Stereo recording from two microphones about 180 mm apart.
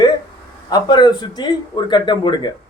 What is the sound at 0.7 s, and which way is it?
A man's voice, 25° left (ahead or behind).